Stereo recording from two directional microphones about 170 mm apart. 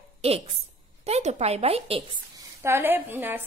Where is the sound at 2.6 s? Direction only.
15° right (ahead or behind).